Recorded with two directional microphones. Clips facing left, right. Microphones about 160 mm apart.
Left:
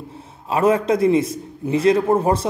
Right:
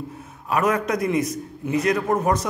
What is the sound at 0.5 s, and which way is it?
Speech, 30° left (ahead or behind).